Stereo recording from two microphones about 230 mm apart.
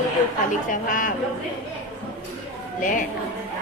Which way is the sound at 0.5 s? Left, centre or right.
Left.